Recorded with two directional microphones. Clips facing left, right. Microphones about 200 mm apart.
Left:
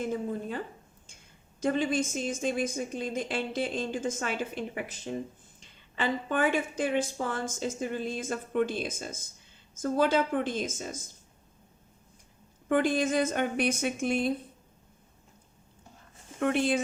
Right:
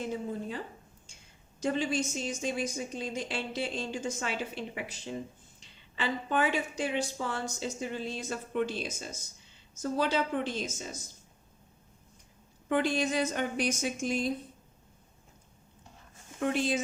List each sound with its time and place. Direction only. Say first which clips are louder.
0.0 s a woman's voice: left 3 dB; 50° left (ahead or behind)
1.6 s a woman's voice: left 3 dB; 55° left (ahead or behind)
12.6 s a woman's voice: left 3 dB; 50° left (ahead or behind)
16.4 s a woman's voice: left 3 dB; 60° left (ahead or behind)